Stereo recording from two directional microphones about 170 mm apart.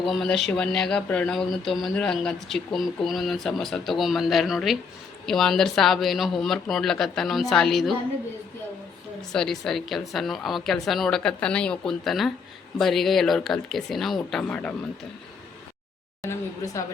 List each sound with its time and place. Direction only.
0.1 s speech: centre (ahead or behind)
9.3 s speech: centre (ahead or behind)
16.2 s a woman's voice: 20° left (ahead or behind)